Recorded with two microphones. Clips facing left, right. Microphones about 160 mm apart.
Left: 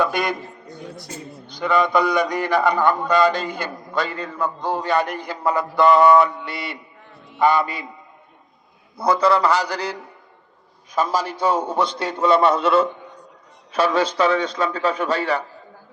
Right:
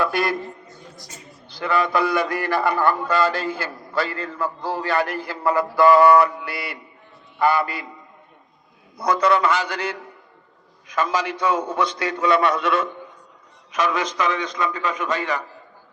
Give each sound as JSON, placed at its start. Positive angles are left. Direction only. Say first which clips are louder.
{"t": 0.0, "sound": "a man's voice", "louder": "left 1 dB", "side_deg": 20}
{"t": 1.5, "sound": "a man's voice", "louder": "left 2 dB", "side_deg": 20}
{"t": 9.0, "sound": "a man's voice", "louder": "left 1 dB", "side_deg": 30}
{"t": 11.3, "sound": "a man's voice", "louder": "left 2 dB", "side_deg": 30}